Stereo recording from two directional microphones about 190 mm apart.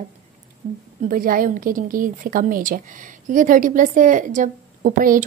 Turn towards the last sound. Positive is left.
turn(degrees=-45)  # may be behind; listen again after turning